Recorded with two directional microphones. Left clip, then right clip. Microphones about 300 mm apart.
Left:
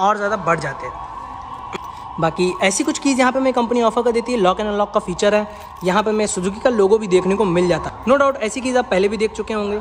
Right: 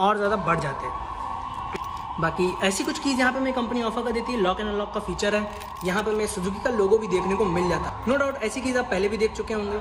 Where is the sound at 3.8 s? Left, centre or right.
Left.